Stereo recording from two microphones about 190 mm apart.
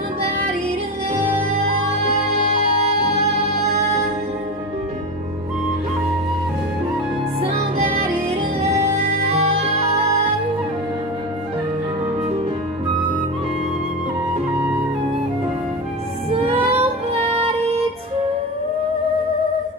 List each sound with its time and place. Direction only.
7.5 s music: 35° right (ahead or behind)
16.3 s music: 30° right (ahead or behind)